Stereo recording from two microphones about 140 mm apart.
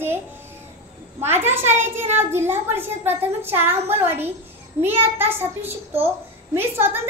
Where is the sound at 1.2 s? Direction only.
15° right (ahead or behind).